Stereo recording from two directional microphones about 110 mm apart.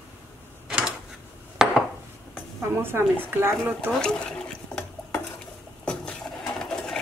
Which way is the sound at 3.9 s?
5° left (ahead or behind).